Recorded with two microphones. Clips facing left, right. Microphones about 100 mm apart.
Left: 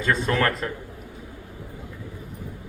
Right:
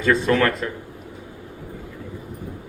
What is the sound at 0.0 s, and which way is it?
Speech, 35° left (ahead or behind).